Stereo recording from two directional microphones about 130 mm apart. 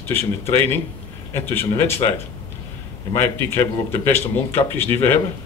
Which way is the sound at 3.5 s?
20° left (ahead or behind).